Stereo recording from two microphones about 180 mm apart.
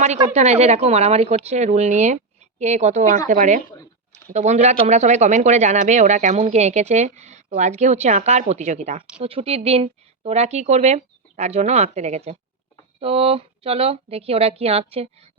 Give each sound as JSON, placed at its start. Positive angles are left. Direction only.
{"t": 0.3, "sound": "speech", "side_deg": -40}